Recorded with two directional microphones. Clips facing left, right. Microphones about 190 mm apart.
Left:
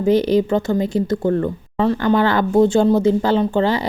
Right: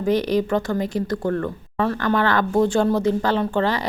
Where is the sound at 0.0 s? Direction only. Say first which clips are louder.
Left 5 dB; 25° left (ahead or behind).